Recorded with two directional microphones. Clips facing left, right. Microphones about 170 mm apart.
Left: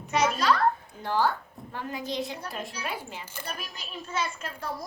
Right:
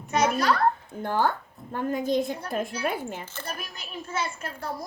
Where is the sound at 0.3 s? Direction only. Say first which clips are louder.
Right 1 dB; 50° right (ahead or behind).